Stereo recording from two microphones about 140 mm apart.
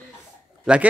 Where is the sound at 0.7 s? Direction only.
5° right (ahead or behind).